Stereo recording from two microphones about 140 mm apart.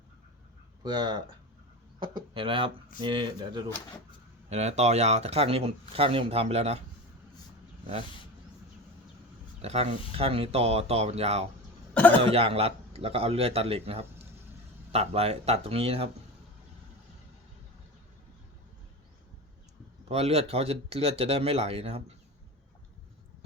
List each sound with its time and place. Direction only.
0.9 s speech: 30° right (ahead or behind)
4.4 s speech: 50° right (ahead or behind)
9.6 s speech: 50° right (ahead or behind)
11.9 s speech: 10° left (ahead or behind)
12.2 s speech: 40° right (ahead or behind)
20.1 s speech: 50° right (ahead or behind)